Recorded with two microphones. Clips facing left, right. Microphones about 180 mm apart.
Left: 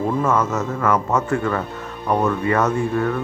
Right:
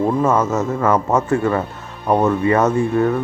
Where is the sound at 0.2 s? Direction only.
30° right (ahead or behind).